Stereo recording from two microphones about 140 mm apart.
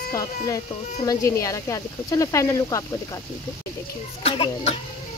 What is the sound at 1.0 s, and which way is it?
Speech, 25° left (ahead or behind).